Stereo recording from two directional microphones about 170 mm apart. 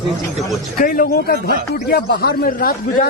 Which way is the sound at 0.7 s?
55° left (ahead or behind).